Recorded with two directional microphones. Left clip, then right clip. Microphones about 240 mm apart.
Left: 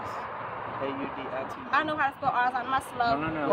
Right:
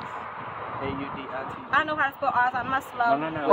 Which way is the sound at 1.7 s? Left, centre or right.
Centre.